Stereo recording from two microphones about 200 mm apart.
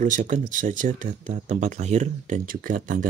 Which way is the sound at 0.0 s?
40° right (ahead or behind).